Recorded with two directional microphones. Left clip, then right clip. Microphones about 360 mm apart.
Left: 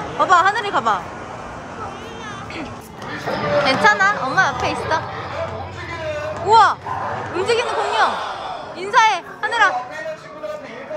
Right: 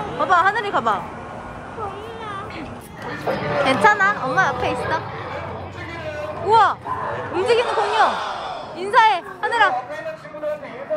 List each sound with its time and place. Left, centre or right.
0.2 s a woman's voice: centre
3.3 s speech: right
3.6 s a woman's voice: centre
6.5 s a woman's voice: centre